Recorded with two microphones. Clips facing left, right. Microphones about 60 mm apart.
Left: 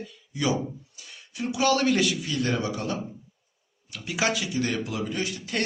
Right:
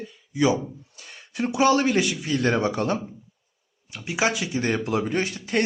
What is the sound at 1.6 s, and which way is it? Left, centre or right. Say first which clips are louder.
Speech: right 3 dB; right.